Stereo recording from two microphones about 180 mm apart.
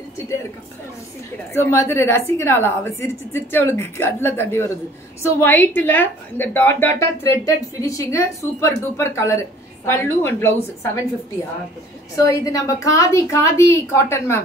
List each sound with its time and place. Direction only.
1.5 s a woman's voice: 15° left (ahead or behind)
12.2 s a woman's voice: 20° left (ahead or behind)